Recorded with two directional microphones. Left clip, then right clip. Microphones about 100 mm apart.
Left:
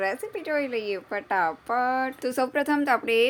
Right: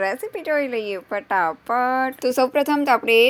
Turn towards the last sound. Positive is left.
turn(degrees=-35)  # may be behind; listen again after turning